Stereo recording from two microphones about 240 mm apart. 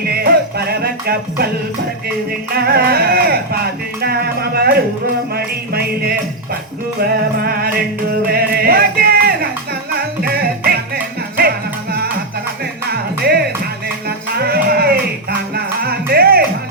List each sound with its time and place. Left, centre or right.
0.0 s music: right
2.6 s music: right
7.4 s music: right